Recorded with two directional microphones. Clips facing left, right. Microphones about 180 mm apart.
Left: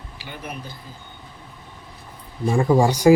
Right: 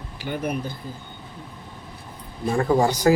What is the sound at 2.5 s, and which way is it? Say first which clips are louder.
Speech: left 2 dB; 10° left (ahead or behind).